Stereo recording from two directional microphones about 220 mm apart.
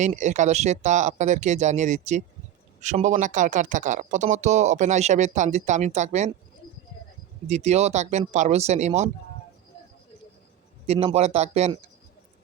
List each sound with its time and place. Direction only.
0.0 s speech: 35° right (ahead or behind)
7.4 s speech: 30° right (ahead or behind)
10.8 s speech: 30° right (ahead or behind)